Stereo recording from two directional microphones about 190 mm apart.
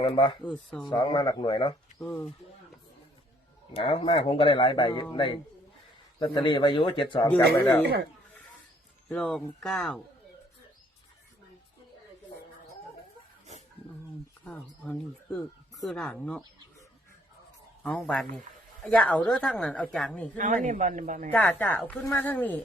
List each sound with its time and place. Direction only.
0.0 s speech: 25° left (ahead or behind)
0.4 s a woman's voice: 5° left (ahead or behind)
0.9 s speech: 25° left (ahead or behind)
2.0 s speech: 5° left (ahead or behind)
3.7 s speech: 30° left (ahead or behind)
9.0 s a woman's voice: 5° left (ahead or behind)
14.4 s a sound: 5° left (ahead or behind)
15.8 s a woman's voice: centre (ahead or behind)
17.8 s a woman's voice: 5° left (ahead or behind)
20.3 s a man's voice: 40° right (ahead or behind)
21.3 s speech: 10° left (ahead or behind)